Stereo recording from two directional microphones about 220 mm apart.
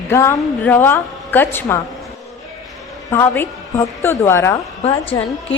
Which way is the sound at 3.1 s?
10° left (ahead or behind).